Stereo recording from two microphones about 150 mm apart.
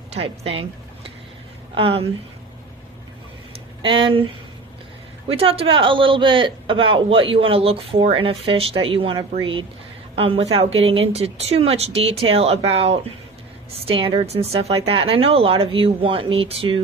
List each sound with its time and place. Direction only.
0.1 s speech: 40° right (ahead or behind)
3.5 s a sound: 35° right (ahead or behind)
5.3 s speech: 40° right (ahead or behind)